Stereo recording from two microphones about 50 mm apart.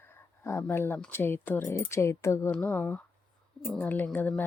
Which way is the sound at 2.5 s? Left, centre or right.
Left.